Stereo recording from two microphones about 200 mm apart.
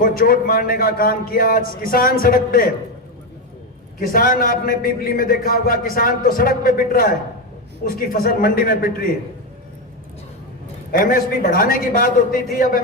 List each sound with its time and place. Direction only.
0.0 s a man's voice: 45° left (ahead or behind)
4.0 s a man's voice: 45° left (ahead or behind)
10.9 s a man's voice: 45° left (ahead or behind)